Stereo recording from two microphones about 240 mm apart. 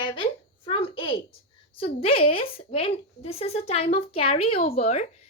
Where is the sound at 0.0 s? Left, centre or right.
Left.